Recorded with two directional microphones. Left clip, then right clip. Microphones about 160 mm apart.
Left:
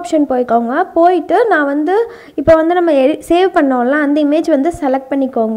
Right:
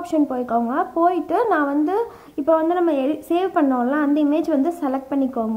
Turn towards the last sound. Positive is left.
turn(degrees=30)  # may be behind; listen again after turning